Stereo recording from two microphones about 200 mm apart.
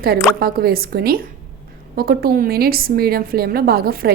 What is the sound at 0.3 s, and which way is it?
Speech, 50° right (ahead or behind).